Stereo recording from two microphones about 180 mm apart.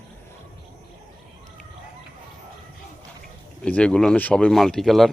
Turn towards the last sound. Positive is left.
turn(degrees=0)  # may be behind; listen again after turning